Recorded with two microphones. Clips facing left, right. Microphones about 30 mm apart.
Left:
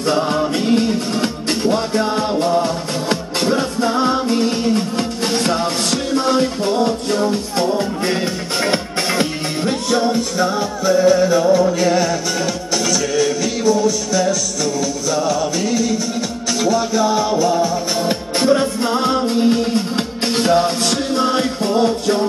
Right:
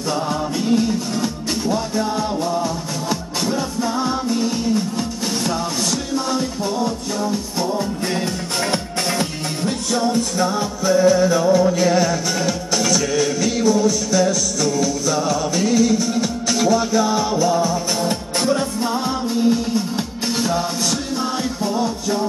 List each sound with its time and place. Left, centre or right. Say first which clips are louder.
0.1 s music: left 4 dB; left